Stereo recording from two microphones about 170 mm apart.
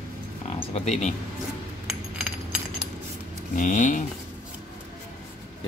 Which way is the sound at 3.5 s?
50° left (ahead or behind).